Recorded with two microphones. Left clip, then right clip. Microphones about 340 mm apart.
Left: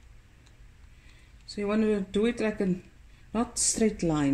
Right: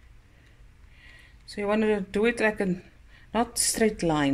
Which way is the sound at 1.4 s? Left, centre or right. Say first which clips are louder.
Right 3 dB; right.